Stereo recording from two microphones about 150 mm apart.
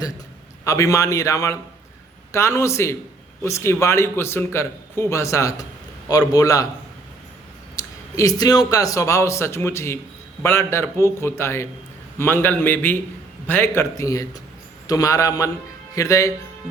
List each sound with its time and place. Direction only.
0.6 s a man's voice: 20° left (ahead or behind)
7.8 s a man's voice: 20° left (ahead or behind)